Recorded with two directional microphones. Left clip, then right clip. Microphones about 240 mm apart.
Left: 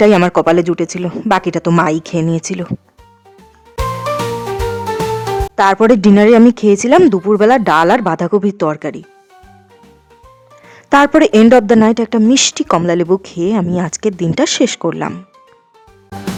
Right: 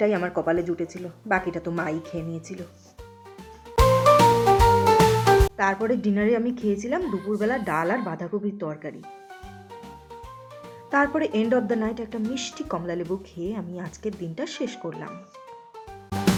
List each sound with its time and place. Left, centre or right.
0.0 s speech: left
3.8 s music: centre
5.5 s speech: left
10.8 s speech: left
16.0 s music: centre